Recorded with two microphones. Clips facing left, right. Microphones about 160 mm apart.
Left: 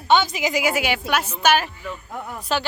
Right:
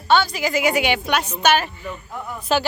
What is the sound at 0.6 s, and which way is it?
A woman's voice, 5° left (ahead or behind).